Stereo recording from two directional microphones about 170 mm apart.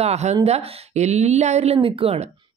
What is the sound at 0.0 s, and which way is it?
Speech, 40° right (ahead or behind).